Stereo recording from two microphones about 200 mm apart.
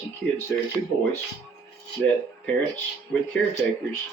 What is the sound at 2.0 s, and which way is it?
Speech, 5° left (ahead or behind).